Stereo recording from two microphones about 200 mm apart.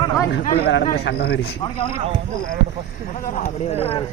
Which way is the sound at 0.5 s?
55° left (ahead or behind).